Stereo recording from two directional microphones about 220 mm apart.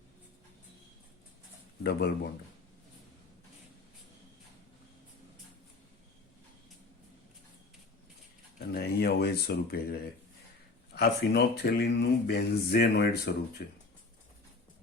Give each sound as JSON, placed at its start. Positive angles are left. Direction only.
{"t": 1.8, "sound": "speech", "side_deg": 45}
{"t": 8.5, "sound": "speech", "side_deg": 45}